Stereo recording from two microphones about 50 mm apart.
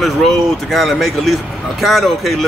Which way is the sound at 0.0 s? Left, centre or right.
Centre.